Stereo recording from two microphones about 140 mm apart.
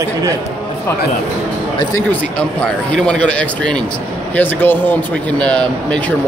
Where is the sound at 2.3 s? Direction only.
5° left (ahead or behind).